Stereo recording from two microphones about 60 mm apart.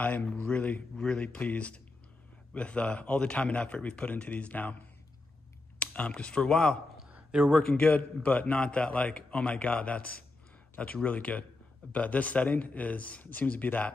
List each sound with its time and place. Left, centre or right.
0.0 s a man's voice: left
5.8 s speech: left
7.1 s a sound: centre
7.7 s a man's voice: left